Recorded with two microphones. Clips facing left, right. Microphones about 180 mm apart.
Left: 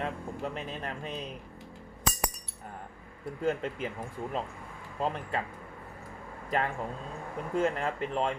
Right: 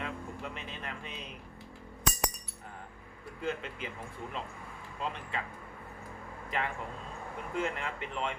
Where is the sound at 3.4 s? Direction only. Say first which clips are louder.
Left 6 dB; 45° left (ahead or behind).